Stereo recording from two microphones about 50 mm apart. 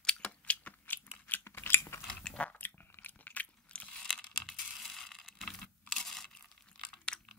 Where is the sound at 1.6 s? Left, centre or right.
Left.